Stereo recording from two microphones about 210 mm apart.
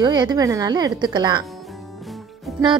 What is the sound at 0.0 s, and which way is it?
A woman's voice, 20° right (ahead or behind).